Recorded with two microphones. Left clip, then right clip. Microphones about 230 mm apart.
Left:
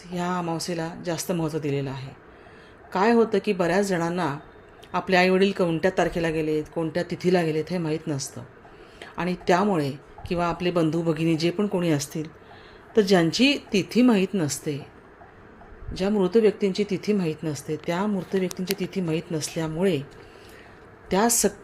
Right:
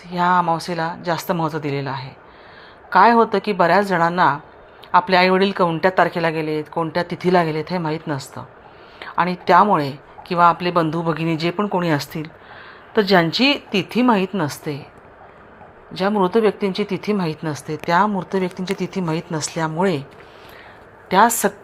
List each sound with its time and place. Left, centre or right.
0.1 s a woman's voice: centre
15.9 s a woman's voice: centre
18.0 s speech: right
18.3 s speech: centre
21.1 s a woman's voice: centre